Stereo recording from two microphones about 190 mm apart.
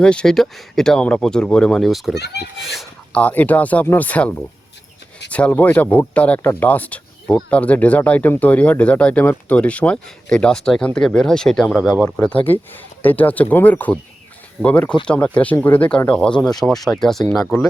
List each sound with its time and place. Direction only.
0.0 s speech: 5° left (ahead or behind)
2.1 s a child's voice: 60° left (ahead or behind)
2.6 s speech: centre (ahead or behind)